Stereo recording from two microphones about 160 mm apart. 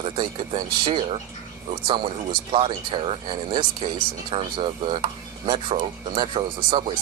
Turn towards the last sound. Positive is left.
turn(degrees=-35)  # may be behind; listen again after turning